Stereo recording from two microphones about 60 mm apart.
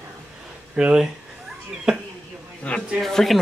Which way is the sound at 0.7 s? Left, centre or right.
Centre.